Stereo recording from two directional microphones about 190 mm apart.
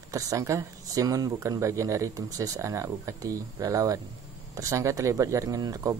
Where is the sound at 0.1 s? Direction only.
15° right (ahead or behind).